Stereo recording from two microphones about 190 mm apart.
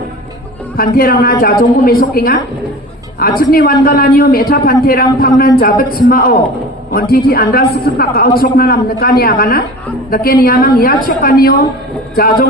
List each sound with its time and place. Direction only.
0.8 s a woman's voice: 50° left (ahead or behind)
3.5 s a woman's voice: 50° left (ahead or behind)